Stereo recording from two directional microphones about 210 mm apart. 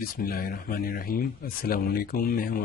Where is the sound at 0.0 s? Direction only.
45° left (ahead or behind).